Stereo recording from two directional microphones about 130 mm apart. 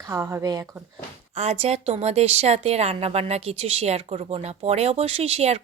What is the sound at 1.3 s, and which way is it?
A woman's voice, 55° right (ahead or behind).